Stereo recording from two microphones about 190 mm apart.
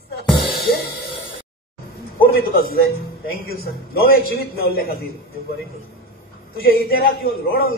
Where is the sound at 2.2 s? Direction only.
55° left (ahead or behind).